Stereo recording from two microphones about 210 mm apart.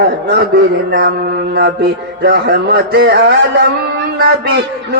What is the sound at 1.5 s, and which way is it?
Mantra, 50° right (ahead or behind).